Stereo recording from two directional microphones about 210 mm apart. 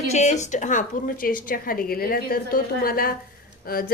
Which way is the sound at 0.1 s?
35° left (ahead or behind).